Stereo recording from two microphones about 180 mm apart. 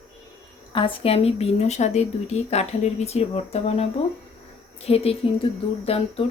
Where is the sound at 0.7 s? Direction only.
30° left (ahead or behind).